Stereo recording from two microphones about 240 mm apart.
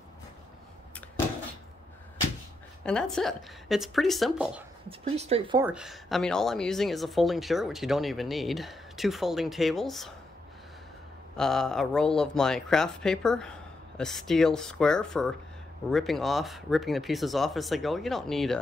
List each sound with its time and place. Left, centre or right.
2.8 s speech: centre
4.8 s speech: right
5.6 s speech: centre
11.3 s speech: centre